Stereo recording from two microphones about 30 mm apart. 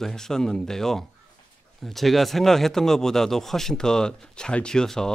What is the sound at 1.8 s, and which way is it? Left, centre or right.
Speech, centre.